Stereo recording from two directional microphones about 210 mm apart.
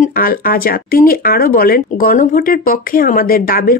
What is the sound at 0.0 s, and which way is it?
Speech, 45° left (ahead or behind).